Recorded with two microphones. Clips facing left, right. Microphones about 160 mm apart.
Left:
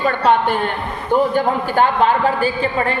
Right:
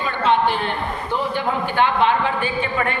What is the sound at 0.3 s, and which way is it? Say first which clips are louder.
A woman's voice: left 1 dB; 50° left (ahead or behind).